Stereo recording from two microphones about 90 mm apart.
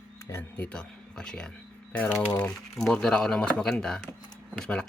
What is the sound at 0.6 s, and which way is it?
Speech, 10° left (ahead or behind).